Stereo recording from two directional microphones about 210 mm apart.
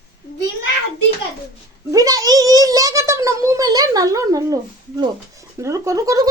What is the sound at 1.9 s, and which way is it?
A child's voice, 15° right (ahead or behind).